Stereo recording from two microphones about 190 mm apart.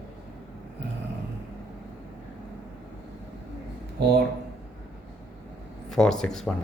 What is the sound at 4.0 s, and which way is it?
Speech, 60° right (ahead or behind).